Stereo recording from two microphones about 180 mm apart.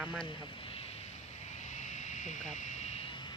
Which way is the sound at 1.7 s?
40° left (ahead or behind).